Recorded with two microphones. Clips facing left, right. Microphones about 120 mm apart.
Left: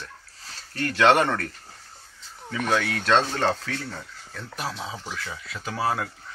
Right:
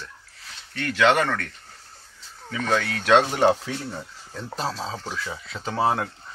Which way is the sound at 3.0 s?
15° right (ahead or behind).